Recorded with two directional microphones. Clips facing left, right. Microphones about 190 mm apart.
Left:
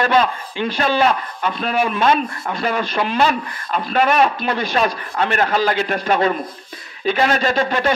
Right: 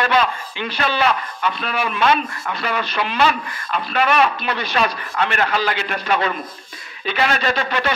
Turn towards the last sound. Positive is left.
turn(degrees=45)  # may be behind; listen again after turning